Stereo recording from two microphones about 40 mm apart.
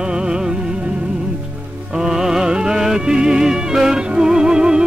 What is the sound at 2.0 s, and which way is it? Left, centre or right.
Music, centre.